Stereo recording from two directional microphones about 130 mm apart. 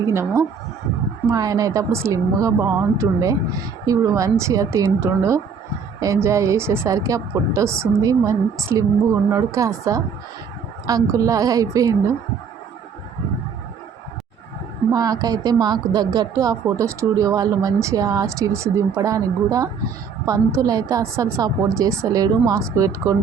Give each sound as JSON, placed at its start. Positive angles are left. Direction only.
{"t": 0.1, "sound": "speech", "side_deg": -20}
{"t": 14.9, "sound": "speech", "side_deg": -30}